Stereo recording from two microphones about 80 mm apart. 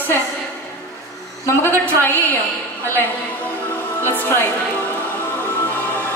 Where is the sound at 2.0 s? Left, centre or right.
Left.